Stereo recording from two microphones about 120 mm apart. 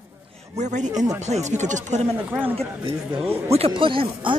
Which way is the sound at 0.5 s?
85° right.